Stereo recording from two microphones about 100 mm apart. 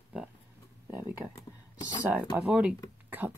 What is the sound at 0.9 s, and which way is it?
Speech, 20° right (ahead or behind).